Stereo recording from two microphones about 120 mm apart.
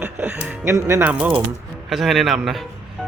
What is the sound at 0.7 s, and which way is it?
Speech, 25° right (ahead or behind).